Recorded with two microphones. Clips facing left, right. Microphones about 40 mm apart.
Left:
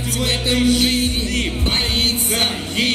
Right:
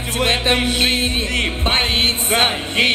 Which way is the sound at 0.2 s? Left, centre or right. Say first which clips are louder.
Right 2 dB; right.